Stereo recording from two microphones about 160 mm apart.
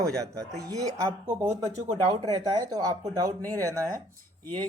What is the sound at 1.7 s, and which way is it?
Speech, 35° right (ahead or behind).